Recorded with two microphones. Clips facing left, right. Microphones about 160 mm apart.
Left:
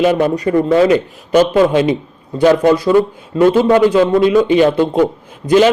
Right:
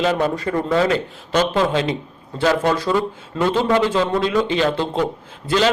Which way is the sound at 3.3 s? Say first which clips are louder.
Left 8 dB; 45° left (ahead or behind).